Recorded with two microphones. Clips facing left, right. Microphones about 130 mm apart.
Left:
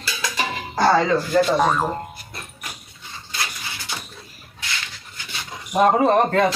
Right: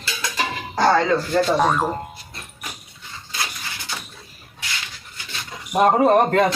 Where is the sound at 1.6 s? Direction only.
Centre (ahead or behind).